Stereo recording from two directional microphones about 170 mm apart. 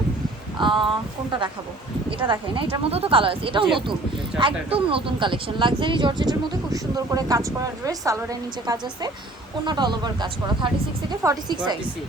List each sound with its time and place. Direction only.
0.6 s speech: 30° right (ahead or behind)